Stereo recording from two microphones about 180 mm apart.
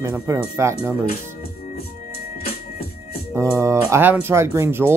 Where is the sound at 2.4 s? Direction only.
60° left (ahead or behind).